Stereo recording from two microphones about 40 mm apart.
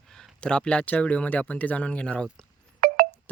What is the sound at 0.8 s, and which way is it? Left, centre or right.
Speech, left.